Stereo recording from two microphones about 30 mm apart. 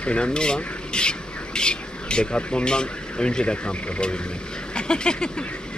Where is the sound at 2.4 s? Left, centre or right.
Left.